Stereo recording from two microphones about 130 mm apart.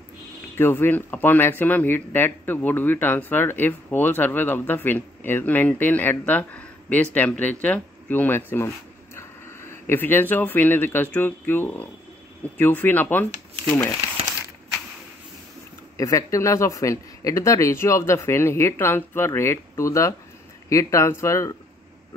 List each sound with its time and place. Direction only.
0.6 s speech: 15° left (ahead or behind)
16.0 s a man's voice: 25° left (ahead or behind)